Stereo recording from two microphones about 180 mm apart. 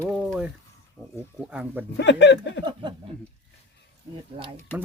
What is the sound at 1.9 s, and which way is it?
Speech, 75° left (ahead or behind).